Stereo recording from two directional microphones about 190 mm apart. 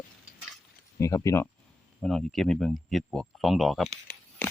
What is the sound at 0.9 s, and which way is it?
Speech, 15° left (ahead or behind).